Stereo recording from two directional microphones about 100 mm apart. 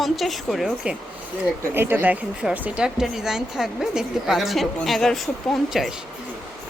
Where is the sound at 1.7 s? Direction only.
20° right (ahead or behind); by 5.9 s centre (ahead or behind).